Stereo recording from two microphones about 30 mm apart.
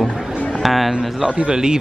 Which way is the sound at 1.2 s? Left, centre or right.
Right.